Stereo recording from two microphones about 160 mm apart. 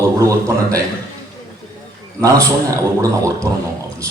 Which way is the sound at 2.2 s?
20° right (ahead or behind).